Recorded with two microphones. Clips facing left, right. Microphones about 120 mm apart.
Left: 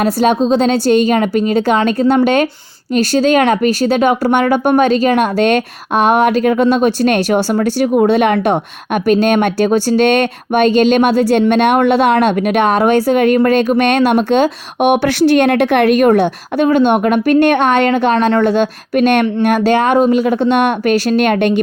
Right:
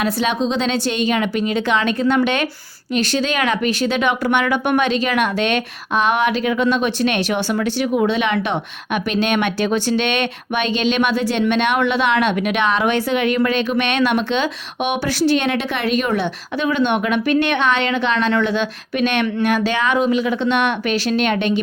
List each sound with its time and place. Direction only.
0.0 s a woman's voice: 45° left (ahead or behind)